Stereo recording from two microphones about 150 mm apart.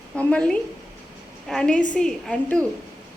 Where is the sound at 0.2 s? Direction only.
10° left (ahead or behind).